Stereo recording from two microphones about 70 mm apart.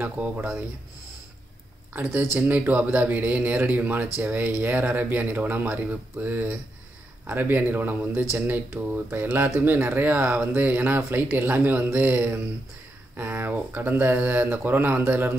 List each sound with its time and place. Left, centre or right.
0.0 s speech: centre
2.3 s speech: right